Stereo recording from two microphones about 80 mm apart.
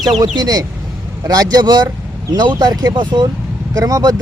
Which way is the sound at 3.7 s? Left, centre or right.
Right.